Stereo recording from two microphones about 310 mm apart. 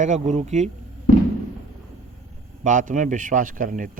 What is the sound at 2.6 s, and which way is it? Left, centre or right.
A man's voice, right.